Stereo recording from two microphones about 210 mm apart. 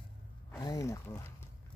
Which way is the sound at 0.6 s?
15° left (ahead or behind).